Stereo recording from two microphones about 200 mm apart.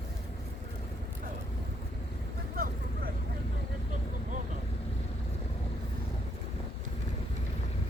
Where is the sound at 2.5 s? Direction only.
50° right (ahead or behind).